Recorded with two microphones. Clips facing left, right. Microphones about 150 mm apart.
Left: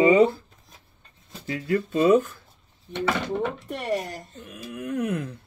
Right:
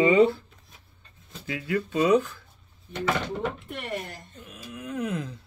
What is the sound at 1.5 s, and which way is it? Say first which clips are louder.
Speech: left 3 dB; 35° left (ahead or behind).